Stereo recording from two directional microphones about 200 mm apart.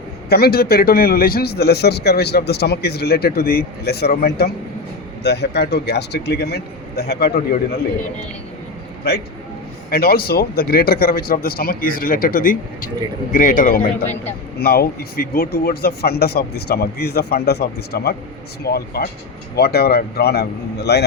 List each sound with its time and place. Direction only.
0.3 s speech: 50° left (ahead or behind)
9.9 s speech: 50° left (ahead or behind)